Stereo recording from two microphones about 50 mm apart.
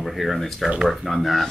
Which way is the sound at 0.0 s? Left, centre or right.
Centre.